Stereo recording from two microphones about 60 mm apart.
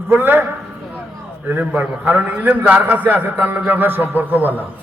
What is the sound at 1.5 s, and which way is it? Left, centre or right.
A man's voice, right.